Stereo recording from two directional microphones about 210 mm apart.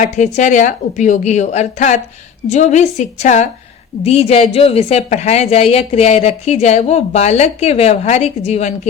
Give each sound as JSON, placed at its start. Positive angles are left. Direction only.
{"t": 0.0, "sound": "a woman's voice", "side_deg": 35}